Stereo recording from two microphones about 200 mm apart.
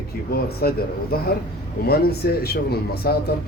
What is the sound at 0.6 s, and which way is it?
Speech, 50° left (ahead or behind).